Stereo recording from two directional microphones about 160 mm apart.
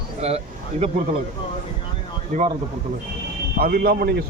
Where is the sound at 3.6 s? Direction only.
65° right (ahead or behind).